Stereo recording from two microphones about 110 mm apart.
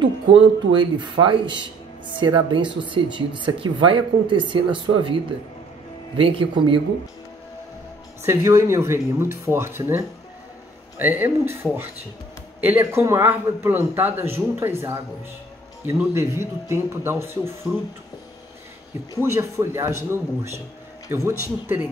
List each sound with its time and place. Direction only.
0.3 s speech: 50° right (ahead or behind)
8.2 s a man's voice: 25° right (ahead or behind)
12.5 s a man's voice: 15° right (ahead or behind)
19.1 s a man's voice: 25° right (ahead or behind)